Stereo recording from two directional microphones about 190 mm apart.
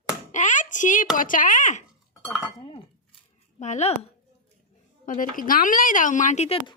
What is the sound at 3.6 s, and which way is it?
Speech, 35° left (ahead or behind).